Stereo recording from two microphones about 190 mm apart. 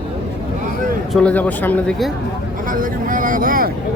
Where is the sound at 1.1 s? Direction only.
5° left (ahead or behind).